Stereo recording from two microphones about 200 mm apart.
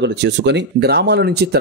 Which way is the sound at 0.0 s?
60° right (ahead or behind).